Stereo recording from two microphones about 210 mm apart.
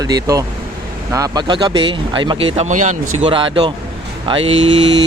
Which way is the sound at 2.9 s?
90° right.